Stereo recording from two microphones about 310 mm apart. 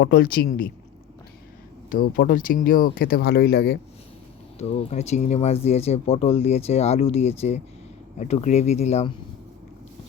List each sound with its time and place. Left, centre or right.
0.0 s speech: left
1.9 s speech: left
4.5 s speech: centre